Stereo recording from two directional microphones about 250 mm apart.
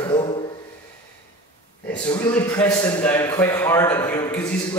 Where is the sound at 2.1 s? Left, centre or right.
Centre.